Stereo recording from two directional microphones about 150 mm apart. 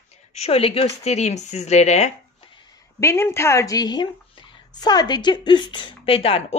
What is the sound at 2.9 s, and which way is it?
A woman's voice, 15° left (ahead or behind).